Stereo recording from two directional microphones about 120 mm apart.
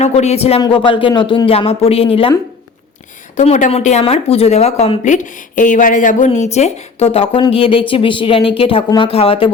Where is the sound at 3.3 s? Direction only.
80° left.